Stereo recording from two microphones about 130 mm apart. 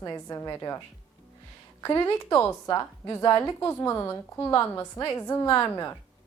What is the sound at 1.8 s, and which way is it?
A woman's voice, 20° left (ahead or behind).